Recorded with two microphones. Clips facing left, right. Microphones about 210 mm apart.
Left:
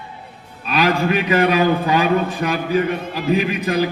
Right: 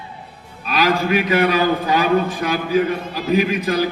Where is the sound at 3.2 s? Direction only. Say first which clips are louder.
Right 1 dB; 35° right (ahead or behind).